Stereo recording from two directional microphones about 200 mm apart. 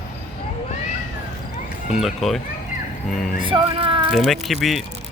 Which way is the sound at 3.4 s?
25° right (ahead or behind).